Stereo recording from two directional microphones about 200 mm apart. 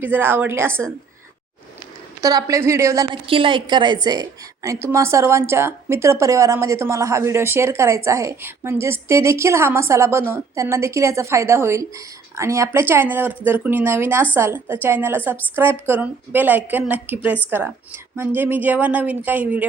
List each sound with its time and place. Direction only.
0.0 s a woman's voice: 10° right (ahead or behind)
2.2 s a woman's voice: 15° right (ahead or behind)
3.2 s a woman's voice: 25° right (ahead or behind); by 19.6 s 10° right (ahead or behind)